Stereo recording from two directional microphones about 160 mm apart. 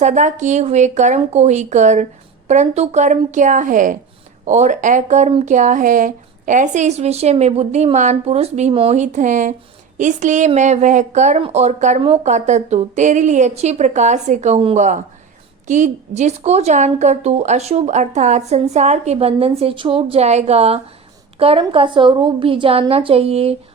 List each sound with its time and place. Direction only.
0.0 s a woman's voice: 50° right (ahead or behind)
15.6 s a woman's voice: 50° right (ahead or behind)